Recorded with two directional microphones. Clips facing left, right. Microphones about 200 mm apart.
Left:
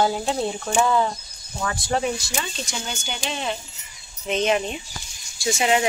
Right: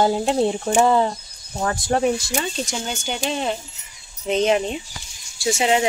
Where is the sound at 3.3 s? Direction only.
40° right (ahead or behind).